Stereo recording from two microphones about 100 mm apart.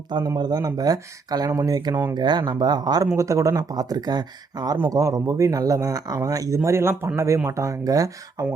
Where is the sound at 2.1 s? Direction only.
45° right (ahead or behind).